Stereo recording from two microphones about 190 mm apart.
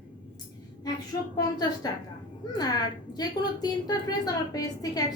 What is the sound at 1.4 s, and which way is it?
A woman's voice, 20° left (ahead or behind).